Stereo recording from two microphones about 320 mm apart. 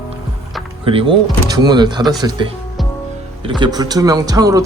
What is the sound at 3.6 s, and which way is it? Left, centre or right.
Speech, centre.